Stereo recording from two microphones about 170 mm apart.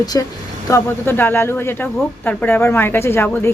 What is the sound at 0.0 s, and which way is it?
Speech, 20° left (ahead or behind).